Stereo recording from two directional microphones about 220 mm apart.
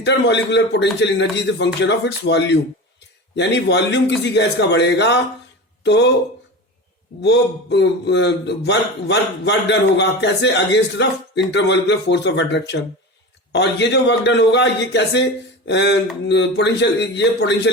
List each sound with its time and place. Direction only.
0.0 s a man's voice: 50° left (ahead or behind)
7.2 s a man's voice: 50° left (ahead or behind)